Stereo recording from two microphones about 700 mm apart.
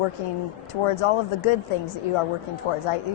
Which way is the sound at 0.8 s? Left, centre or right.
Left.